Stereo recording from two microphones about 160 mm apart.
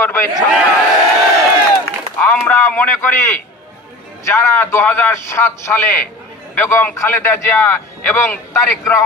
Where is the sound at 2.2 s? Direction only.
10° left (ahead or behind).